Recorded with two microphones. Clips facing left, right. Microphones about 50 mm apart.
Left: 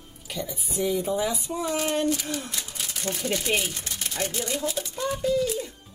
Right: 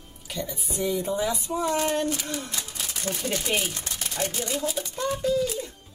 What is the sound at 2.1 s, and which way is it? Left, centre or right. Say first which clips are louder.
Speech: left 2 dB; centre.